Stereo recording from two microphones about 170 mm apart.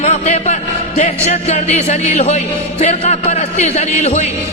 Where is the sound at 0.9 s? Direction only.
40° left (ahead or behind).